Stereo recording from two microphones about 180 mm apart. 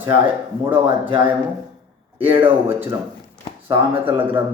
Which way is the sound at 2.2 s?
10° right (ahead or behind).